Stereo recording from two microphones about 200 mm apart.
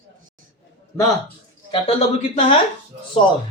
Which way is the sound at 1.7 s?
25° left (ahead or behind).